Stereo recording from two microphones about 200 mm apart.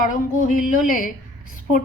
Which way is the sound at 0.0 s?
45° left (ahead or behind).